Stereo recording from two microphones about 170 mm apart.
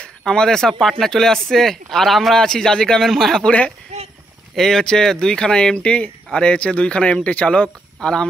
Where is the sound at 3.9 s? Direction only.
40° right (ahead or behind).